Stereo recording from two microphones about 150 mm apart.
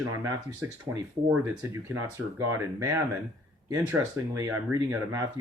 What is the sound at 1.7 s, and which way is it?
Speech, 20° right (ahead or behind).